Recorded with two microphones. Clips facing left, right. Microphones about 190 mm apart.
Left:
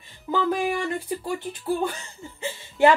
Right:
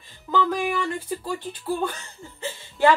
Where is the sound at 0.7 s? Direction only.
20° left (ahead or behind).